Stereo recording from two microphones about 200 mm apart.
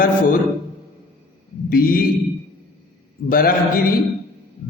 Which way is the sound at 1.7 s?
45° left (ahead or behind).